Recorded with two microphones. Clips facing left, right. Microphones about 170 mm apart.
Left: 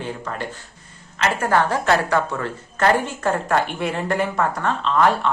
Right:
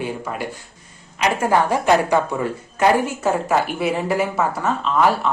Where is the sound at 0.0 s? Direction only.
10° right (ahead or behind).